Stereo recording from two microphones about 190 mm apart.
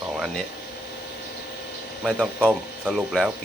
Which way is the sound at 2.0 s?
5° right (ahead or behind).